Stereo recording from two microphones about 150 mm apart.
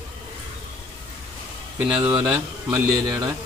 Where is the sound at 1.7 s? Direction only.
10° right (ahead or behind).